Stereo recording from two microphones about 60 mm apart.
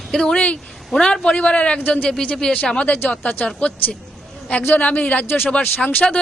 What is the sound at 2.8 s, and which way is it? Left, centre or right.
Speech, left.